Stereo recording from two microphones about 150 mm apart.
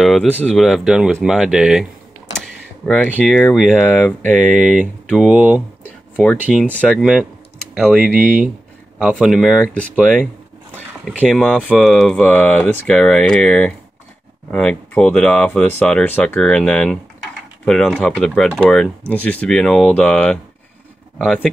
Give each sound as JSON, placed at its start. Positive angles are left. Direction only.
{"t": 0.0, "sound": "speech", "side_deg": 0}
{"t": 0.3, "sound": "speech", "side_deg": 10}
{"t": 0.6, "sound": "speech", "side_deg": 0}
{"t": 4.4, "sound": "speech", "side_deg": 0}
{"t": 6.2, "sound": "speech", "side_deg": 5}
{"t": 8.0, "sound": "speech", "side_deg": -65}
{"t": 9.1, "sound": "speech", "side_deg": 0}
{"t": 9.6, "sound": "speech", "side_deg": 10}